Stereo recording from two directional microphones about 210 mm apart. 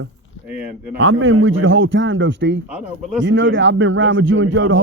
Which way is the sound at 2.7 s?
5° right (ahead or behind).